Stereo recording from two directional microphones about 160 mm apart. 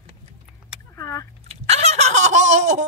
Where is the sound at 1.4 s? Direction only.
45° right (ahead or behind).